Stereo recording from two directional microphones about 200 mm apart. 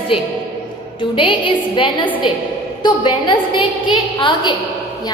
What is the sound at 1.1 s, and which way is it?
A woman's voice, 25° left (ahead or behind).